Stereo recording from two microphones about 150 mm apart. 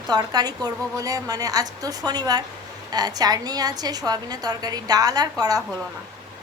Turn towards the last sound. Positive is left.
turn(degrees=-25)  # may be behind; listen again after turning